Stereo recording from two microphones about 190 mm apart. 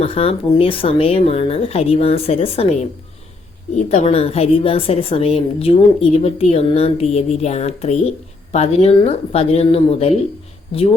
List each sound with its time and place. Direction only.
0.0 s a woman's voice: 30° left (ahead or behind)